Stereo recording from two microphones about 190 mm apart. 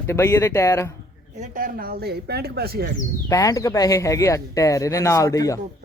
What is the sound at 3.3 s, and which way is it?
Speech, 15° left (ahead or behind).